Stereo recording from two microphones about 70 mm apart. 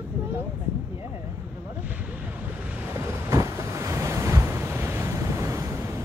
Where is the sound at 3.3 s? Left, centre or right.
Right.